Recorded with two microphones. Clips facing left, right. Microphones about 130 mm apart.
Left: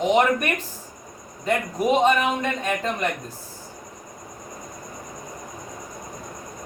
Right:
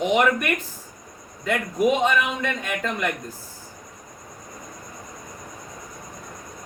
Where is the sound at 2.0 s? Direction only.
30° left (ahead or behind).